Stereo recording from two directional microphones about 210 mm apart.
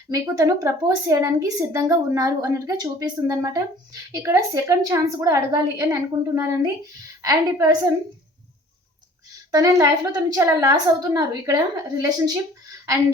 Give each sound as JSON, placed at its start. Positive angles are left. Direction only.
{"t": 0.1, "sound": "a woman's voice", "side_deg": -15}
{"t": 9.5, "sound": "a woman's voice", "side_deg": -15}